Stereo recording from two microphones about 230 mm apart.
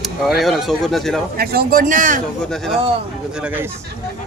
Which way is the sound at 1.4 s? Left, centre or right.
Right.